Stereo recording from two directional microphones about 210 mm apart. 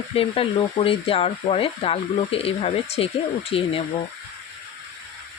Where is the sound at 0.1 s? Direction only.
25° left (ahead or behind).